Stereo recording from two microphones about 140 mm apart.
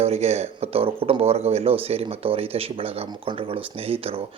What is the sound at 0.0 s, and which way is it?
Speech, 50° right (ahead or behind).